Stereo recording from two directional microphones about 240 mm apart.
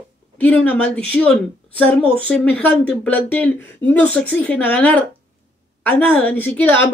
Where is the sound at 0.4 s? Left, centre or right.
Centre.